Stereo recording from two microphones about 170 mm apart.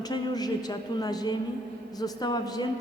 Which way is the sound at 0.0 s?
25° left (ahead or behind).